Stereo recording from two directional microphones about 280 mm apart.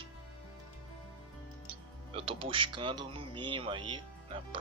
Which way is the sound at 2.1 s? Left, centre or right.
Centre.